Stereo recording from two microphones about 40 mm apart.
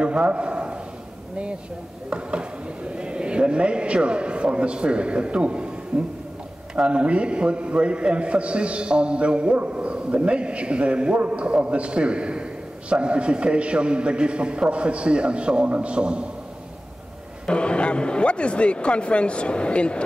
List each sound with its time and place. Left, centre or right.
0.0 s a sound: right
2.0 s speech: right
17.5 s a man's voice: left